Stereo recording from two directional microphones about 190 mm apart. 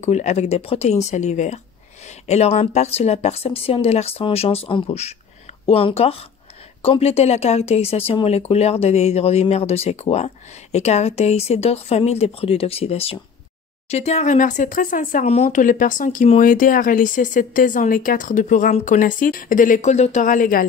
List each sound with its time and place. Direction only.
0.0 s speech: 35° left (ahead or behind)